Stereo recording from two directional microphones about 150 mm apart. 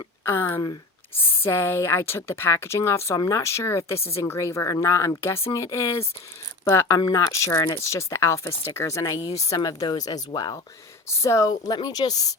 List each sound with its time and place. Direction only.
0.3 s speech: 15° left (ahead or behind)